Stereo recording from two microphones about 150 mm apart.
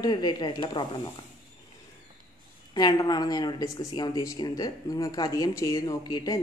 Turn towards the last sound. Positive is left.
turn(degrees=25)  # may be behind; listen again after turning